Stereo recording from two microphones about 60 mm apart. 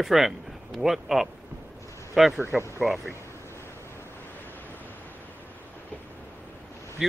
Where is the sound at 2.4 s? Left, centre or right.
Right.